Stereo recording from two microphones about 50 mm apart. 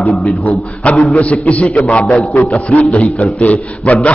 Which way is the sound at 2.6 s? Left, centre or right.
Left.